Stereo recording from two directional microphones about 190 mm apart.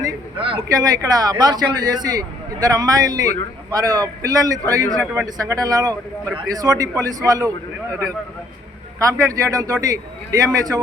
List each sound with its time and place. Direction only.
0.0 s a man's voice: 25° right (ahead or behind)